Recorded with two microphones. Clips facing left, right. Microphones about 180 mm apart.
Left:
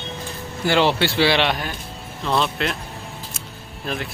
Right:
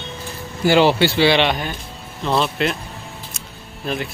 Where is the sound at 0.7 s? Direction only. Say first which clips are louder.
Right 4 dB; 5° right (ahead or behind).